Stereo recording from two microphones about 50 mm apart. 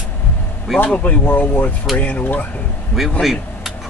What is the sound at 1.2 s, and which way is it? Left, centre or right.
Speech, left.